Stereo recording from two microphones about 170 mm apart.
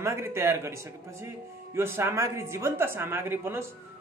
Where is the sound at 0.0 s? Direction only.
15° right (ahead or behind).